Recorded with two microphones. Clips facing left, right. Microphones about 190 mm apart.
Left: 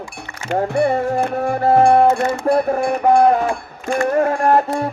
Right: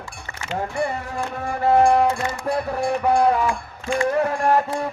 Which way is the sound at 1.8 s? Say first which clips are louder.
Left 5 dB; 60° left (ahead or behind).